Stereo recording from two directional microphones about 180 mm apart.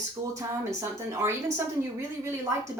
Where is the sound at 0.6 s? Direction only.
15° right (ahead or behind).